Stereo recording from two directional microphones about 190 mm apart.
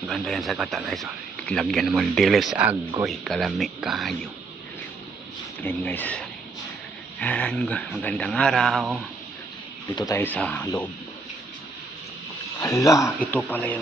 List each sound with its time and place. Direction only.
0.0 s speech: centre (ahead or behind)
5.6 s speech: 10° left (ahead or behind)
9.9 s speech: 15° left (ahead or behind)
12.5 s speech: 15° left (ahead or behind)